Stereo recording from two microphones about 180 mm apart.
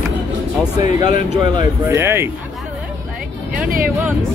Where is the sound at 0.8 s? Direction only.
45° left (ahead or behind).